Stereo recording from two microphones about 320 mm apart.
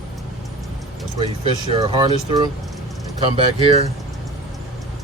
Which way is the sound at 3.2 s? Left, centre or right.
Centre.